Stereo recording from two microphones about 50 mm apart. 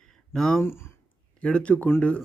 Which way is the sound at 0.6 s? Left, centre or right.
Left.